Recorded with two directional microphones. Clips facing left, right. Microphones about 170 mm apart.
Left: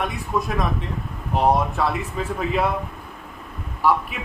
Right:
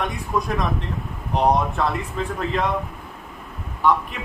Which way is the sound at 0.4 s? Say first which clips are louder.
Even; centre (ahead or behind).